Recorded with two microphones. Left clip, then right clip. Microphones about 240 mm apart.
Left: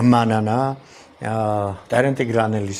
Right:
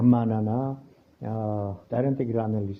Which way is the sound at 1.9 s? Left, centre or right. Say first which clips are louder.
Left 9 dB; centre.